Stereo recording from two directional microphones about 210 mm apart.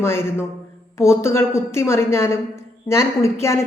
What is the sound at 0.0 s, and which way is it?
A woman's voice, 10° left (ahead or behind).